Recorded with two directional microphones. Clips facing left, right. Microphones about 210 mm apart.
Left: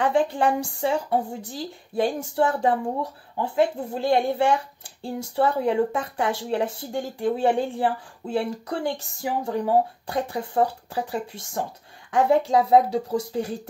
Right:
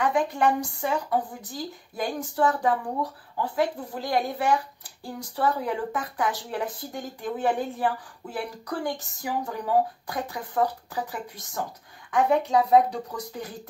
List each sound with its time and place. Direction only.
0.0 s speech: 30° left (ahead or behind)